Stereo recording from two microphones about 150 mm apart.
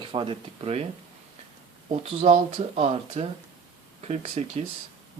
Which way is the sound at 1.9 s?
40° right (ahead or behind).